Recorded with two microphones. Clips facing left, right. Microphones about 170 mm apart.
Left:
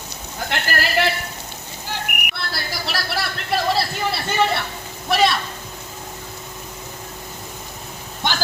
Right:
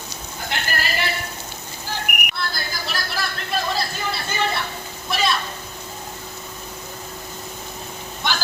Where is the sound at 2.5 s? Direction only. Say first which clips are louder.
Left 2 dB; 70° left (ahead or behind).